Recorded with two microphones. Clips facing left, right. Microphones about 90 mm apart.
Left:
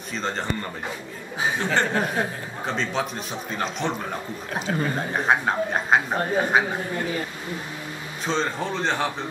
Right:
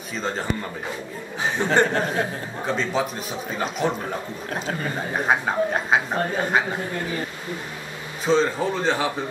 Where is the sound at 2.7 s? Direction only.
Centre (ahead or behind).